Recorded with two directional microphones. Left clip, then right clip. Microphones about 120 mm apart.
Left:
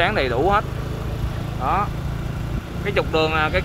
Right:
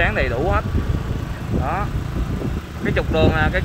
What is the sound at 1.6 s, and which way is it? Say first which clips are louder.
Speech: left 4 dB; 20° left (ahead or behind).